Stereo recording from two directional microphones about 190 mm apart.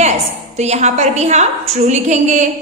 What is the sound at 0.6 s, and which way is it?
A woman's voice, 35° right (ahead or behind).